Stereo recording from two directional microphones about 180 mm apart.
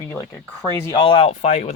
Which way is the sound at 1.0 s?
30° left (ahead or behind).